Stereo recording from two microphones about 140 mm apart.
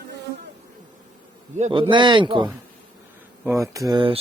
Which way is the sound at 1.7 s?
35° right (ahead or behind).